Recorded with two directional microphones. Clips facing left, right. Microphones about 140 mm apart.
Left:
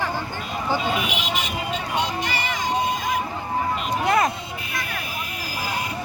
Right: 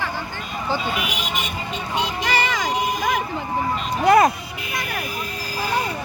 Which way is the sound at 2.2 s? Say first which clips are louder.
Right 4 dB; 85° right.